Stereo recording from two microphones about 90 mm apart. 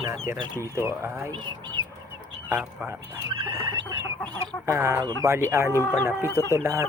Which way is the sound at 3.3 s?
60° right (ahead or behind).